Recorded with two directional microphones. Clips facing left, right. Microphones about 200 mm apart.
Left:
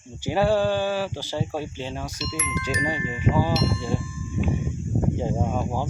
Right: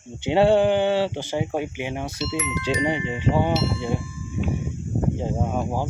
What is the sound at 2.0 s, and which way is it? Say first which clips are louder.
Speech: right 4 dB; 25° right (ahead or behind).